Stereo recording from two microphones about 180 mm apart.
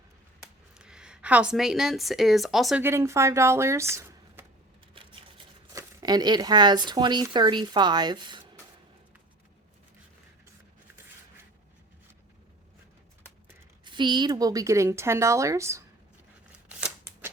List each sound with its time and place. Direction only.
0.7 s speech: 5° right (ahead or behind)
2.8 s speech: 15° right (ahead or behind)
5.7 s speech: 20° right (ahead or behind)
13.8 s a woman's voice: 25° right (ahead or behind)
16.6 s scissors: 10° right (ahead or behind)